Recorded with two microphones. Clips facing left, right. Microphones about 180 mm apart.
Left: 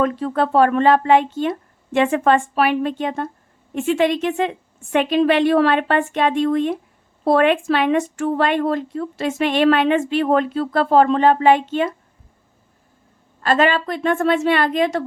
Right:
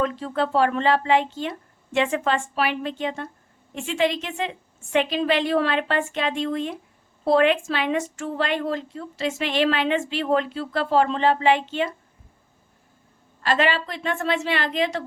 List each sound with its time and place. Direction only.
0.0 s a woman's voice: 50° left (ahead or behind)
13.4 s a woman's voice: 45° left (ahead or behind)